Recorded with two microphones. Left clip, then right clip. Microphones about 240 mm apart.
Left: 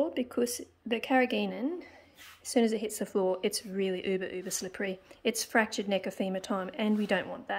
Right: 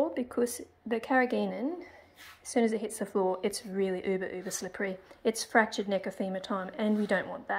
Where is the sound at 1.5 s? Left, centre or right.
Left.